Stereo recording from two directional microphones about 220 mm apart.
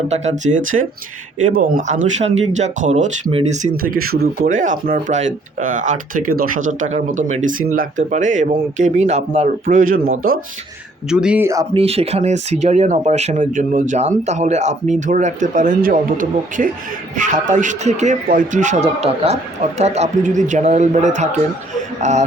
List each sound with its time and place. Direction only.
0.1 s speech: 30° right (ahead or behind)
11.1 s speech: 5° right (ahead or behind)
11.7 s speech: 25° right (ahead or behind)